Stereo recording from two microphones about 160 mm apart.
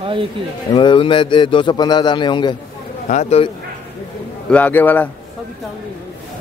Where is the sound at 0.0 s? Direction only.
35° right (ahead or behind).